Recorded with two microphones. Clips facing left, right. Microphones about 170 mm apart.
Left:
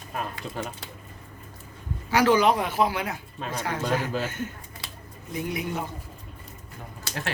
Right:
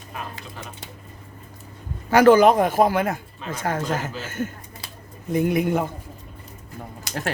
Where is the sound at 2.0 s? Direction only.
50° right (ahead or behind).